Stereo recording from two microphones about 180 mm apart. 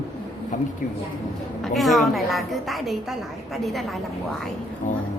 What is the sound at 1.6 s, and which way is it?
A woman's voice, centre (ahead or behind).